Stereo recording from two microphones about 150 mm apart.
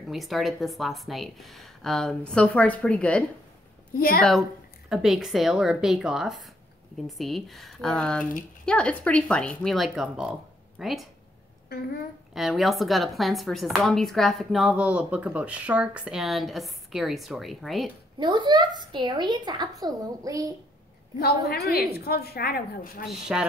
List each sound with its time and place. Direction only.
0.1 s speech: centre (ahead or behind)
4.3 s speech: centre (ahead or behind)
12.4 s speech: centre (ahead or behind)
18.2 s a woman's voice: 30° right (ahead or behind)
21.2 s a woman's voice: 90° left
23.0 s speech: 5° right (ahead or behind)